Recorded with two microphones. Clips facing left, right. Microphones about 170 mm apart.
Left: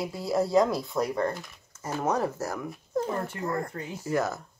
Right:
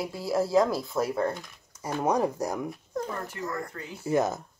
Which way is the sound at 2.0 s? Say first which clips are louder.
Right 2 dB; 15° right (ahead or behind).